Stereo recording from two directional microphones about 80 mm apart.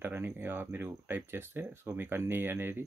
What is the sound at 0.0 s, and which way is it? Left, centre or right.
Speech, right.